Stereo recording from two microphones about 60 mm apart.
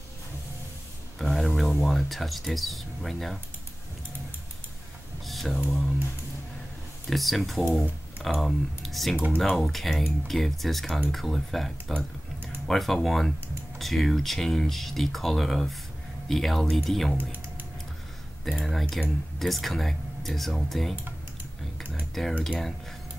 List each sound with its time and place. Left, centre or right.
1.1 s speech: centre
5.2 s a sound: centre
7.1 s speech: centre
17.2 s typing: right
18.4 s speech: centre
22.2 s speech: centre